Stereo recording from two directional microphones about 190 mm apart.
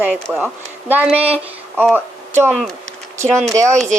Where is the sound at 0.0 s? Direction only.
10° right (ahead or behind).